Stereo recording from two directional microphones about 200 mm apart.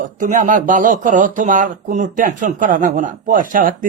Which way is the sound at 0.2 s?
40° right (ahead or behind).